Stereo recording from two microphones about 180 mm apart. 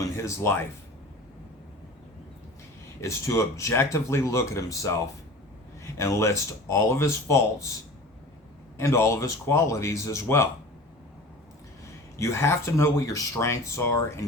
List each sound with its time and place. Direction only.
0.2 s speech: 15° left (ahead or behind)
3.0 s speech: 15° left (ahead or behind)
6.0 s speech: 15° left (ahead or behind)
8.8 s speech: 15° left (ahead or behind)
12.2 s speech: 15° left (ahead or behind)